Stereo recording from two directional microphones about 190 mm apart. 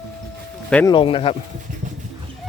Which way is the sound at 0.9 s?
25° left (ahead or behind).